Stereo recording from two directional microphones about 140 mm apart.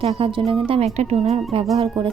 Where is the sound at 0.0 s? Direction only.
40° right (ahead or behind).